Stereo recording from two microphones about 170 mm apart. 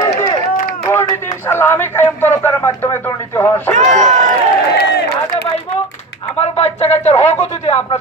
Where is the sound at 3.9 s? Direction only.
45° right (ahead or behind).